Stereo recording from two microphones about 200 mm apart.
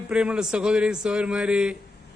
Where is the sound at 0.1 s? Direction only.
5° right (ahead or behind).